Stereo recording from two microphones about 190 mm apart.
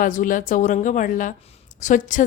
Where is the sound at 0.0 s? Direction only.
45° left (ahead or behind).